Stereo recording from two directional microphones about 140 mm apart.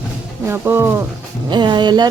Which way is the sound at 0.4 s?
15° right (ahead or behind).